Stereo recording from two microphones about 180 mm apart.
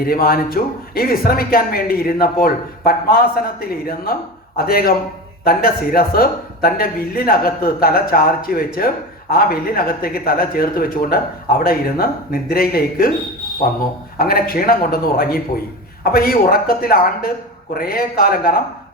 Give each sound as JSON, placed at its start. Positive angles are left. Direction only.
{"t": 0.0, "sound": "speech", "side_deg": 55}
{"t": 14.2, "sound": "speech", "side_deg": 55}